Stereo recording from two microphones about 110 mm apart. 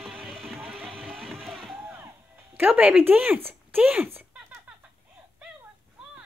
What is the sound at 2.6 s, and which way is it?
A woman's voice, 15° right (ahead or behind).